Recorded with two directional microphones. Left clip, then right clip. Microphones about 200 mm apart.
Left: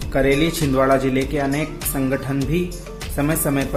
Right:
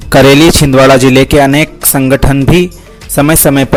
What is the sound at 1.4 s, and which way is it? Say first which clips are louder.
Speech: right 15 dB; 55° right (ahead or behind).